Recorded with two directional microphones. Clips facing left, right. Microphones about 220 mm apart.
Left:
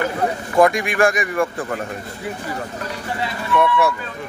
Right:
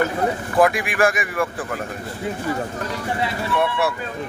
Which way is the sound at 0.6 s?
5° right (ahead or behind).